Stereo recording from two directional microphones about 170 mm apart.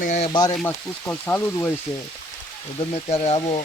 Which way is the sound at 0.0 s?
45° left (ahead or behind).